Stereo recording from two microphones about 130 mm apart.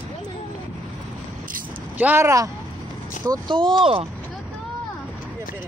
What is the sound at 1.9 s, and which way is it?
Speech, 15° right (ahead or behind).